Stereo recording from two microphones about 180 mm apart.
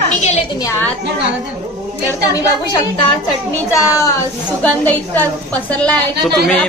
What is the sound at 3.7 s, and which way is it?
A woman's voice, 15° left (ahead or behind).